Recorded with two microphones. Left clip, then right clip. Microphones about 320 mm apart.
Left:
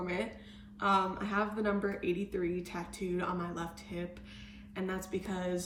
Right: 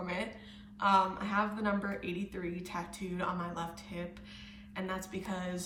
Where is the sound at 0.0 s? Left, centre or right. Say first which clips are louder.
Left 1 dB; centre.